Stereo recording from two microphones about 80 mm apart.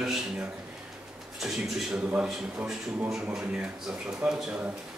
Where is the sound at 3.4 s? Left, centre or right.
Centre.